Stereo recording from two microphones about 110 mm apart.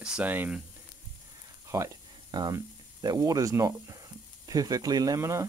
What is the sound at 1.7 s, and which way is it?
Speech, 30° right (ahead or behind).